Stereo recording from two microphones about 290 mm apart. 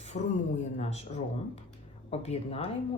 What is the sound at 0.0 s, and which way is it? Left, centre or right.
Speech, left.